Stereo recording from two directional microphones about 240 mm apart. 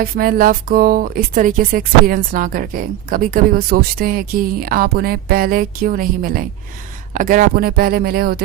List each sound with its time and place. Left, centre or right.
0.0 s speech: right